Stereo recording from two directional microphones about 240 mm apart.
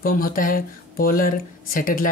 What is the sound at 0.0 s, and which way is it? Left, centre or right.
Speech, left.